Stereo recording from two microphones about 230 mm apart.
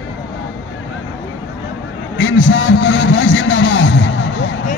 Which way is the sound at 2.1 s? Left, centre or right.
Left.